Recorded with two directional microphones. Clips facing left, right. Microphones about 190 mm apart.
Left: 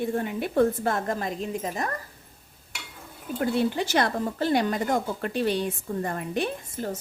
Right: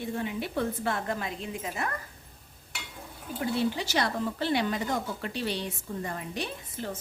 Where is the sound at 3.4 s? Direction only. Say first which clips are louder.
Left 4 dB; 50° left (ahead or behind).